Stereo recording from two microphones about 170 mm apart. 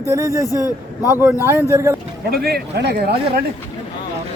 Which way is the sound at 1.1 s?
10° right (ahead or behind).